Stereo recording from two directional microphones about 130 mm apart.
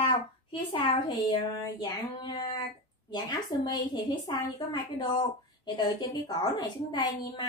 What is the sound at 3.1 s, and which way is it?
Speech, 30° left (ahead or behind).